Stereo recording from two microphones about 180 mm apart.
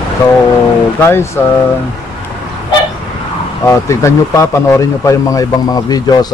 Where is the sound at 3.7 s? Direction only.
15° left (ahead or behind).